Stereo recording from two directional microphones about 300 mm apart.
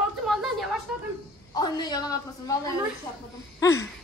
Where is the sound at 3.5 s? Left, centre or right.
Centre.